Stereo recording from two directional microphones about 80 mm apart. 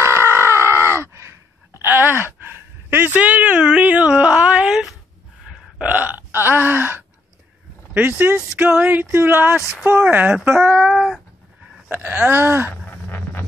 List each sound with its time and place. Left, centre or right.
0.0 s groan: right; by 4.9 s centre
5.9 s burping: centre
6.4 s gasp: right
7.9 s speech: right; by 11.1 s centre
11.9 s a sound: right
12.8 s a sound: left